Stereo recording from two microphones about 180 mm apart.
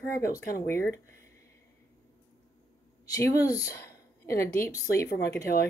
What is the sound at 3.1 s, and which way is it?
A woman's voice, 20° left (ahead or behind).